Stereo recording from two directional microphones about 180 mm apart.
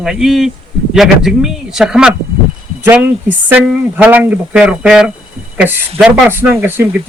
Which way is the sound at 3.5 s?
10° right (ahead or behind).